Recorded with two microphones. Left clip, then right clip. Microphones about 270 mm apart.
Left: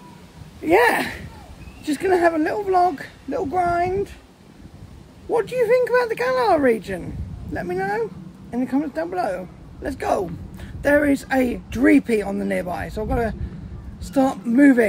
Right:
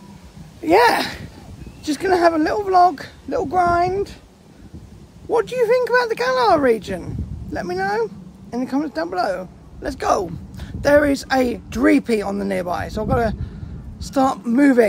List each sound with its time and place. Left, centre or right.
0.7 s speech: centre
5.3 s speech: centre